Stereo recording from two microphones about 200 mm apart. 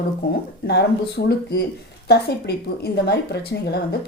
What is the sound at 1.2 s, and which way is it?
A woman's voice, 50° left (ahead or behind).